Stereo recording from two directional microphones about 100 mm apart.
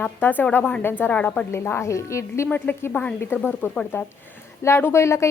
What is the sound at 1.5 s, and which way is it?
Speech, 25° left (ahead or behind).